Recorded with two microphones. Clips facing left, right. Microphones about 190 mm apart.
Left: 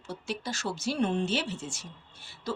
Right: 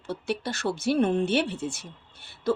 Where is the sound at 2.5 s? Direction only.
55° right (ahead or behind).